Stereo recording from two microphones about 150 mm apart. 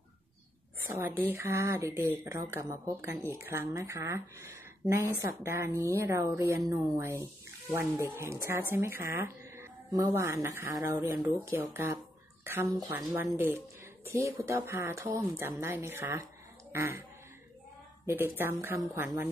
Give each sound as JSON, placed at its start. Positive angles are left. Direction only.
{"t": 0.8, "sound": "speech", "side_deg": -15}
{"t": 12.6, "sound": "speech", "side_deg": -25}
{"t": 18.0, "sound": "speech", "side_deg": -15}